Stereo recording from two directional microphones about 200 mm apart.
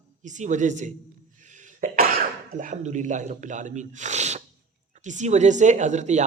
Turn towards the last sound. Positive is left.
turn(degrees=-35)  # may be behind; listen again after turning